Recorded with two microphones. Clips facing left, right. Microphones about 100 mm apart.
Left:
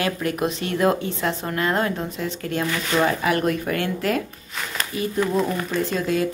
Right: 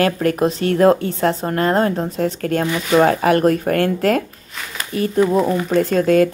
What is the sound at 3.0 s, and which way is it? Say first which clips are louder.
Speech: right 7 dB; 45° right (ahead or behind).